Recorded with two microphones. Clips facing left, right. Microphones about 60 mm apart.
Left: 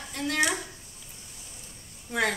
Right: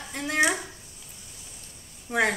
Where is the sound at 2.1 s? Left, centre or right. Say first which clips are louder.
Right 3 dB; right.